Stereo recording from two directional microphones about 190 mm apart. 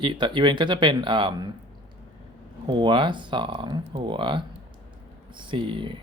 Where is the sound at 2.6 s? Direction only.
25° right (ahead or behind).